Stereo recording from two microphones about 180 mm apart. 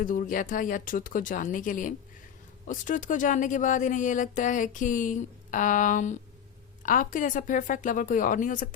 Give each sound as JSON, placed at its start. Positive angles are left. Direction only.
{"t": 0.0, "sound": "speech", "side_deg": 50}